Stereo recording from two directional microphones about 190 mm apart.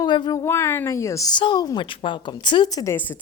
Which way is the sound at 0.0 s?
20° left (ahead or behind).